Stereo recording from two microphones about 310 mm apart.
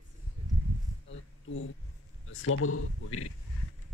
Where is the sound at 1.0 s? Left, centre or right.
Left.